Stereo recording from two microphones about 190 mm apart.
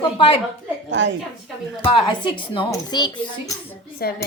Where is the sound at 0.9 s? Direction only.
70° right (ahead or behind).